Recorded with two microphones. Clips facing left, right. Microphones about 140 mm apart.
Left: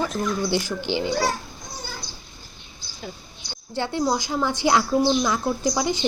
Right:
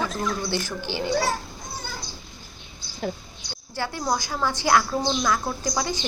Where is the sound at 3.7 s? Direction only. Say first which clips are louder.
Left 3 dB; 20° left (ahead or behind).